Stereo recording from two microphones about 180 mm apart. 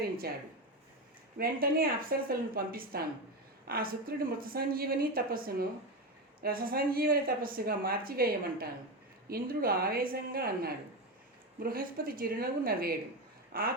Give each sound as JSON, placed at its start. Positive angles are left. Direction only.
{"t": 1.4, "sound": "a woman's voice", "side_deg": -55}